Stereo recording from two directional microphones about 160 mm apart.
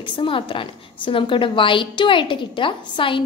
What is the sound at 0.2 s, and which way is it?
A woman's voice, 30° left (ahead or behind).